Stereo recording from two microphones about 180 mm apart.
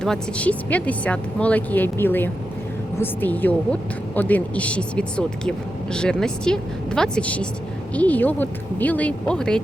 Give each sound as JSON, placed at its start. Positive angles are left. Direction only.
{"t": 0.0, "sound": "a woman's voice", "side_deg": 5}